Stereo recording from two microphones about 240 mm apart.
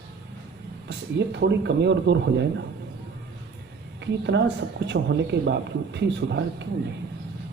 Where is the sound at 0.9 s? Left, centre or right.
Right.